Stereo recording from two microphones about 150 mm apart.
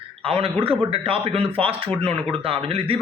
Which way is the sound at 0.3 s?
40° right (ahead or behind).